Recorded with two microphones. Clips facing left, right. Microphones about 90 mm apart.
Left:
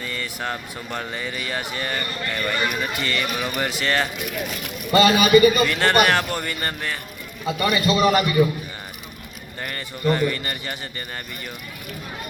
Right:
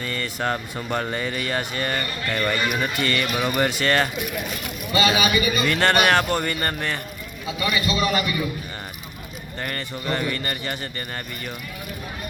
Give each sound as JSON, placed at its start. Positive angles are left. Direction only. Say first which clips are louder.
{"t": 0.0, "sound": "a sound", "louder": "right 3 dB", "side_deg": 5}
{"t": 0.5, "sound": "speech", "louder": "right 4 dB", "side_deg": -5}
{"t": 4.9, "sound": "a man's voice", "louder": "left 5 dB", "side_deg": 50}
{"t": 5.6, "sound": "speech", "louder": "even", "side_deg": 0}
{"t": 7.4, "sound": "a man's voice", "louder": "left 4 dB", "side_deg": 50}
{"t": 9.6, "sound": "a man's voice", "louder": "right 1 dB", "side_deg": 5}